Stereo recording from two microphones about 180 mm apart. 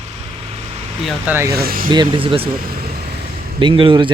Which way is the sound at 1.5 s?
60° right (ahead or behind).